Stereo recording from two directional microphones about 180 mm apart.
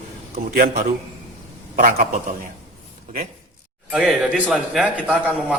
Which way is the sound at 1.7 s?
55° right (ahead or behind).